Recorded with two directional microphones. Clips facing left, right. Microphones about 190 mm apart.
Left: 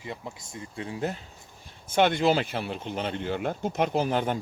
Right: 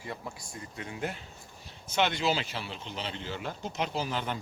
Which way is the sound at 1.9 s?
50° left (ahead or behind).